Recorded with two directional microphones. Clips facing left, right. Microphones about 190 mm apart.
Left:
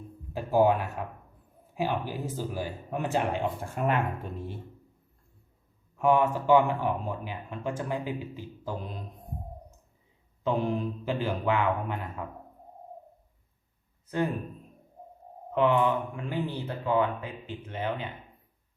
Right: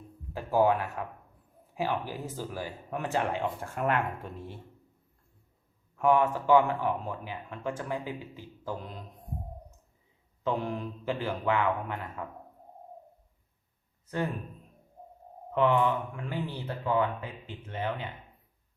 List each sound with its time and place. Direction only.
0.3 s speech: 20° left (ahead or behind)
6.0 s speech: 20° left (ahead or behind)
10.4 s speech: 20° left (ahead or behind)
15.5 s speech: 15° left (ahead or behind)